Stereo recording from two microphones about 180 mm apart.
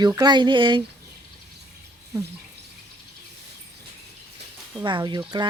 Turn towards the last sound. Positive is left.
turn(degrees=-25)  # may be behind; listen again after turning